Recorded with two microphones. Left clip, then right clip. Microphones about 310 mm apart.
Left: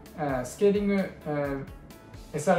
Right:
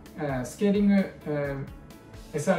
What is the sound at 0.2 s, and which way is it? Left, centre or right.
Speech, centre.